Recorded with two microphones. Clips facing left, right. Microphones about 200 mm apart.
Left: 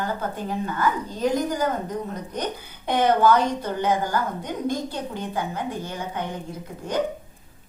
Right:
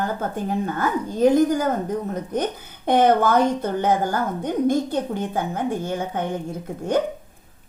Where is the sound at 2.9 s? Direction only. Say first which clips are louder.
Right 2 dB; 50° right (ahead or behind).